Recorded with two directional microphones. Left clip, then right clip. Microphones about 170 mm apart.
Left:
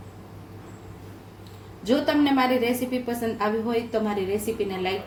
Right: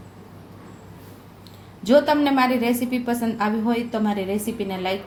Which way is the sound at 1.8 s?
45° right (ahead or behind).